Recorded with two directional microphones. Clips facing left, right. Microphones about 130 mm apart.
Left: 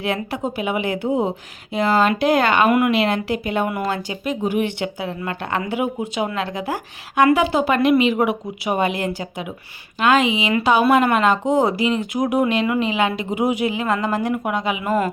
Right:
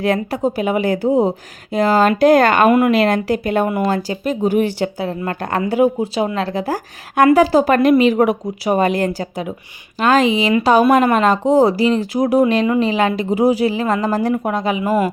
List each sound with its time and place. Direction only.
0.0 s speech: 40° right (ahead or behind)
3.7 s speech: 25° right (ahead or behind)
3.9 s speech: 40° right (ahead or behind)
14.8 s a man's voice: 10° right (ahead or behind)